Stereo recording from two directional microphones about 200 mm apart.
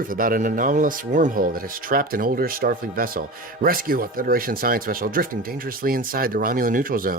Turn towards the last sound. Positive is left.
turn(degrees=-45)  # may be behind; listen again after turning